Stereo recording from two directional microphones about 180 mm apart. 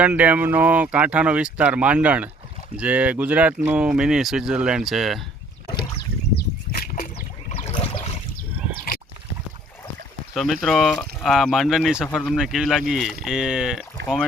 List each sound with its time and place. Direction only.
0.0 s speech: 10° right (ahead or behind)
6.3 s a sound: 50° left (ahead or behind)
7.6 s boat: 35° left (ahead or behind)
10.3 s speech: centre (ahead or behind)